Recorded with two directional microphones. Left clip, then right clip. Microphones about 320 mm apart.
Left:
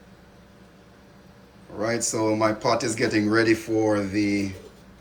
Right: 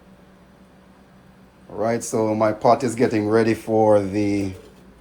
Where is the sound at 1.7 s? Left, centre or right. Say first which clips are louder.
Right 4 dB; centre.